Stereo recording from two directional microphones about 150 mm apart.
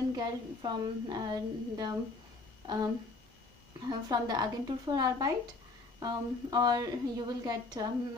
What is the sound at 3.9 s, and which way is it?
Speech, 30° right (ahead or behind).